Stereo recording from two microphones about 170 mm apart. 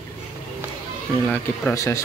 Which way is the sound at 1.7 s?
20° left (ahead or behind).